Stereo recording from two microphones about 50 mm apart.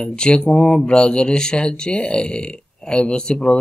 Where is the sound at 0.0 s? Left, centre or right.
Centre.